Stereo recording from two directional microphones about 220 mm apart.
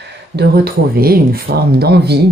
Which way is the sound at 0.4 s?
45° right (ahead or behind).